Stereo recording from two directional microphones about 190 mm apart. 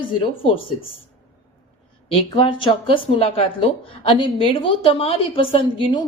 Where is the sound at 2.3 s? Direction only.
25° left (ahead or behind).